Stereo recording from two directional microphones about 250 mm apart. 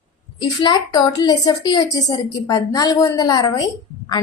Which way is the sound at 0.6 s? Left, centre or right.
Centre.